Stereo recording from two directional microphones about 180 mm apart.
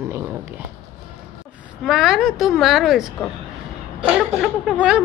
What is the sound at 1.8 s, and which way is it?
Speech, centre (ahead or behind).